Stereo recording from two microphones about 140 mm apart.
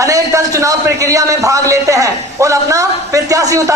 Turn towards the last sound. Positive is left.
turn(degrees=-25)  # may be behind; listen again after turning